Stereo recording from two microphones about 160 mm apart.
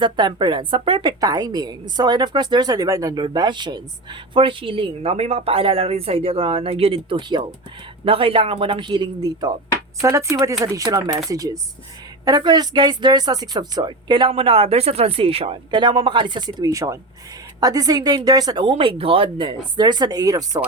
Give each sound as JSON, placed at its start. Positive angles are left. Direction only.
{"t": 0.0, "sound": "speech", "side_deg": -30}